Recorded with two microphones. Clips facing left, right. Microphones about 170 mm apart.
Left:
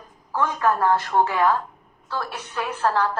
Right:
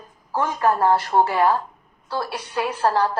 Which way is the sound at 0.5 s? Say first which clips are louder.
Right 2 dB; 35° right (ahead or behind).